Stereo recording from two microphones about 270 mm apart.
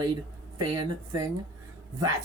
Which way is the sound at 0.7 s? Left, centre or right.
Centre.